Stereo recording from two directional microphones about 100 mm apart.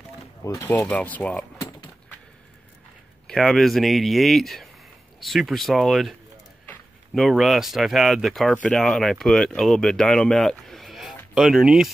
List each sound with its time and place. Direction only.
0.7 s speech: 15° left (ahead or behind)
3.3 s speech: 5° left (ahead or behind)
7.2 s speech: centre (ahead or behind)
10.6 s a sound: centre (ahead or behind)
11.3 s speech: 5° right (ahead or behind)